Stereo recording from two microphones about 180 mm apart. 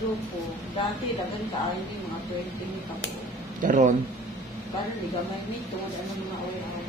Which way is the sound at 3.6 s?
45° right (ahead or behind).